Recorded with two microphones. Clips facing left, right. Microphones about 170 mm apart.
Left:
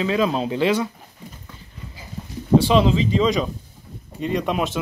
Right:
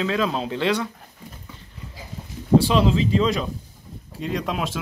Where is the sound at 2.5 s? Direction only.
Centre (ahead or behind).